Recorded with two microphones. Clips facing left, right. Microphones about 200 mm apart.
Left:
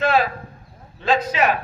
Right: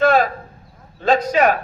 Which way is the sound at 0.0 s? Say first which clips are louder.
Right 4 dB; 45° right (ahead or behind).